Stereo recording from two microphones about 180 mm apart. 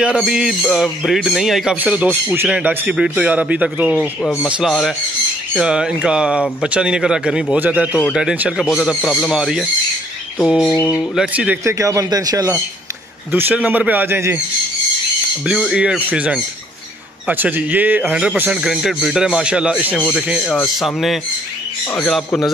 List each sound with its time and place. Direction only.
0.0 s speech: 5° right (ahead or behind)
4.2 s a sound: 15° left (ahead or behind)
4.5 s speech: centre (ahead or behind)
10.7 s a sound: 15° left (ahead or behind)
11.1 s speech: 10° right (ahead or behind)
13.3 s speech: 10° right (ahead or behind)
15.4 s speech: centre (ahead or behind)